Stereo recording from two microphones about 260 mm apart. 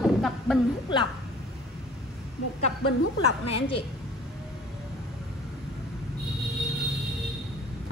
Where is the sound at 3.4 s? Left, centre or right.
Left.